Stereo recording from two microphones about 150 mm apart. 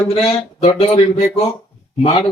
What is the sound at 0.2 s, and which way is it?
A man's voice, 40° left (ahead or behind).